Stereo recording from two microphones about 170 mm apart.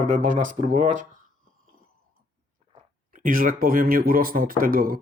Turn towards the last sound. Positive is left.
turn(degrees=-60)  # may be behind; listen again after turning